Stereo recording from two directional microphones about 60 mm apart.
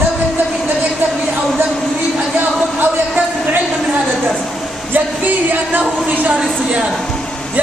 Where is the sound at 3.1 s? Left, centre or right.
Right.